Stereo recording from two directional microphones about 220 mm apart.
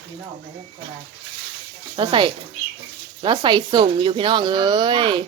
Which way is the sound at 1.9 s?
20° right (ahead or behind).